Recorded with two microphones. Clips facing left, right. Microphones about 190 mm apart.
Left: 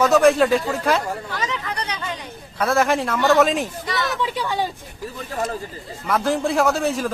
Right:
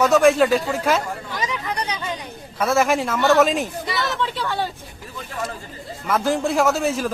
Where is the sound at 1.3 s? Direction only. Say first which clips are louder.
Right 1 dB; 15° right (ahead or behind).